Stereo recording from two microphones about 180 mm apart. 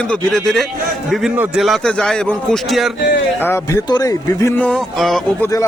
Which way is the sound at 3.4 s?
15° left (ahead or behind).